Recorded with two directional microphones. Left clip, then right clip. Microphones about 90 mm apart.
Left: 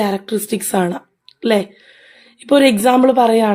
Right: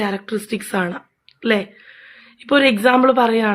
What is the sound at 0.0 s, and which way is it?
A woman's voice, 45° left (ahead or behind).